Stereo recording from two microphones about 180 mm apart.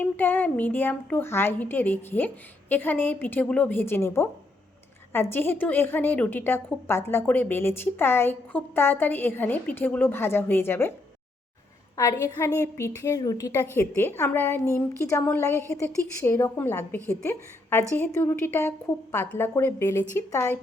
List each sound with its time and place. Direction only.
0.0 s a woman's voice: 10° left (ahead or behind)
11.9 s a woman's voice: 15° left (ahead or behind)